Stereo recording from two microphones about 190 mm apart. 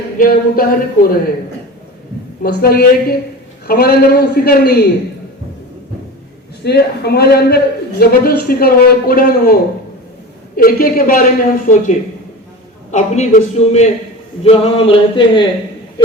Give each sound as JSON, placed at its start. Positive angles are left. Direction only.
{"t": 0.2, "sound": "a man's voice", "side_deg": 50}
{"t": 2.4, "sound": "a man's voice", "side_deg": 55}
{"t": 6.7, "sound": "a man's voice", "side_deg": 60}
{"t": 10.6, "sound": "a man's voice", "side_deg": 50}
{"t": 14.4, "sound": "a sound", "side_deg": 30}